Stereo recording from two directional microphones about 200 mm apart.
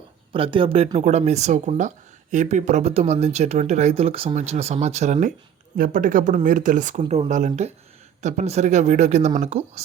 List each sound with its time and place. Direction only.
0.3 s speech: 25° right (ahead or behind)